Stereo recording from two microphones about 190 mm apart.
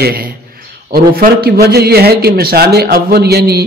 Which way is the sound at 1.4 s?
55° right (ahead or behind).